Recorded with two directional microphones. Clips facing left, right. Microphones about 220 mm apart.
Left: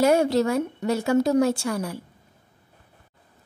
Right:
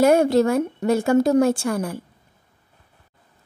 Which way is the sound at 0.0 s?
50° right (ahead or behind).